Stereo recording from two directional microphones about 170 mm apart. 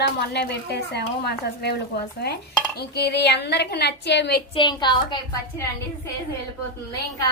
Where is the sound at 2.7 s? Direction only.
75° left (ahead or behind).